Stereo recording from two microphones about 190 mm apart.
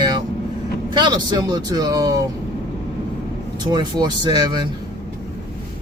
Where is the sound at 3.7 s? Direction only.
20° right (ahead or behind).